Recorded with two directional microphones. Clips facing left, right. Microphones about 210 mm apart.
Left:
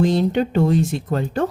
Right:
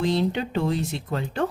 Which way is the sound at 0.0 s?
45° left (ahead or behind).